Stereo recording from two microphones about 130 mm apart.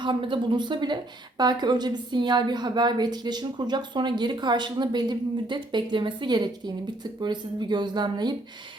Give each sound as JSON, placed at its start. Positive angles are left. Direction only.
{"t": 0.0, "sound": "a woman's voice", "side_deg": -40}